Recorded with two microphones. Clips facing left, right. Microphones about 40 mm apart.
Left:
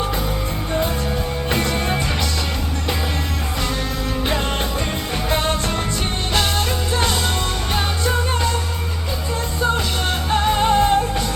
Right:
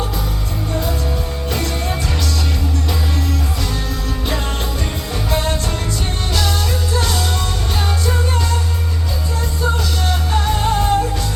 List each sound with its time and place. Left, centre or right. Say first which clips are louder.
1.5 s music: left 2 dB; left
6.9 s music: left 1 dB; left
10.9 s music: right 1 dB; left